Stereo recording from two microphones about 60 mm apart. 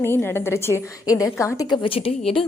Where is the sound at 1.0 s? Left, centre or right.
Left.